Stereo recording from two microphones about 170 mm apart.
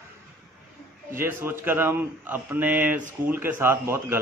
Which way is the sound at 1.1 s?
15° right (ahead or behind).